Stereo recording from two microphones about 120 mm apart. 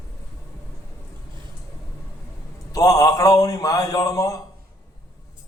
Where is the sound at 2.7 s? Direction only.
30° left (ahead or behind).